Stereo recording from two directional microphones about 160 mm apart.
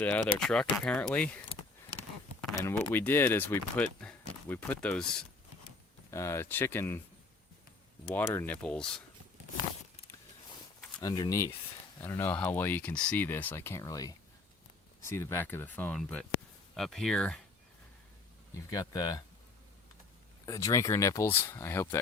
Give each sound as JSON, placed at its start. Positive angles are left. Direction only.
{"t": 0.0, "sound": "speech", "side_deg": 5}
{"t": 2.7, "sound": "speech", "side_deg": 10}
{"t": 6.1, "sound": "speech", "side_deg": 20}
{"t": 8.1, "sound": "speech", "side_deg": 15}
{"t": 8.6, "sound": "speech", "side_deg": 5}
{"t": 11.0, "sound": "speech", "side_deg": 25}
{"t": 18.7, "sound": "speech", "side_deg": 25}
{"t": 20.4, "sound": "speech", "side_deg": 20}